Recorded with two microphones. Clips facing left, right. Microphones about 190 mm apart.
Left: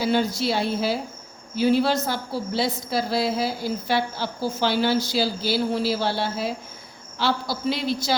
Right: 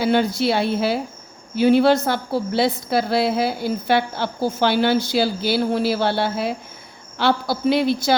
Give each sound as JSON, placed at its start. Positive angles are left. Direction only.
{"t": 0.0, "sound": "a woman's voice", "side_deg": -60}